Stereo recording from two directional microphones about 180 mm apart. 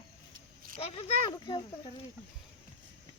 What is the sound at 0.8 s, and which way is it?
Speech, 30° left (ahead or behind).